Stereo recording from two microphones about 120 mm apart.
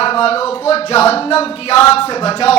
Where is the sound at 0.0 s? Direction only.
60° left (ahead or behind).